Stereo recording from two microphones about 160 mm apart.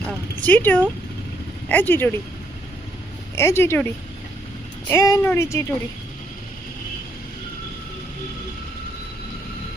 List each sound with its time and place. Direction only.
0.4 s speech: 10° left (ahead or behind)
3.3 s speech: 15° left (ahead or behind)